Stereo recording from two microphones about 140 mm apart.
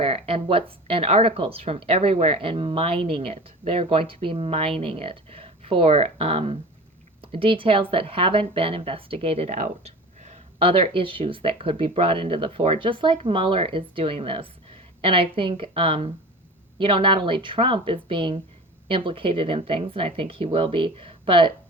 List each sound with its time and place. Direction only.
0.0 s speech: 40° right (ahead or behind)